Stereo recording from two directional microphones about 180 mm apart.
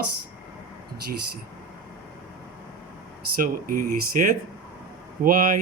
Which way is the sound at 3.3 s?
50° right (ahead or behind).